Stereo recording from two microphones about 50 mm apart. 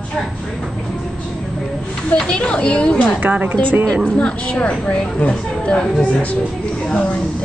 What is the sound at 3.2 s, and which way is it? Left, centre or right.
Speech, right.